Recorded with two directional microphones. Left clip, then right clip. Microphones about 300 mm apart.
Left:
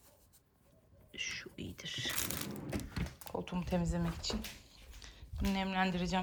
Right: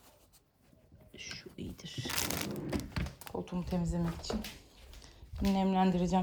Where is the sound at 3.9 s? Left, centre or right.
Centre.